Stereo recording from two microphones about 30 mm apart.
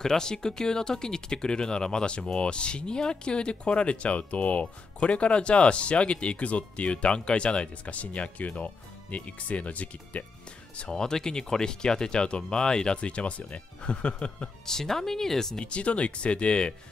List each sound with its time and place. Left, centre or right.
0.0 s speech: centre; by 5.1 s left
5.1 s speech: left
7.2 s speech: left
10.9 s speech: left
12.9 s speech: left
14.7 s speech: centre
15.6 s speech: left